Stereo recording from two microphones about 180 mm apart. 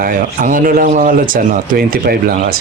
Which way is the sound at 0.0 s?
50° right (ahead or behind).